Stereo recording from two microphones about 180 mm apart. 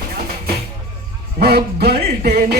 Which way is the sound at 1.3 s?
60° right (ahead or behind).